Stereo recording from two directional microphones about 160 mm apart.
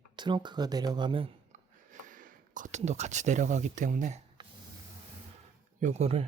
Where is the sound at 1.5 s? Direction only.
55° right (ahead or behind).